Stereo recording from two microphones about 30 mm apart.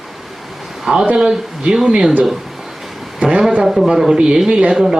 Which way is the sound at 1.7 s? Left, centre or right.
Centre.